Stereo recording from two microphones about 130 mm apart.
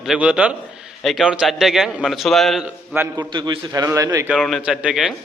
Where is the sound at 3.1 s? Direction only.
35° right (ahead or behind).